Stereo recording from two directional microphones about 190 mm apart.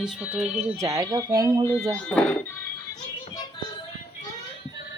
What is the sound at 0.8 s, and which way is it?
Speech, 20° right (ahead or behind).